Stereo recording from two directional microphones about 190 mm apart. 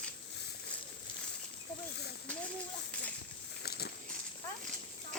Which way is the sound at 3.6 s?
60° left (ahead or behind).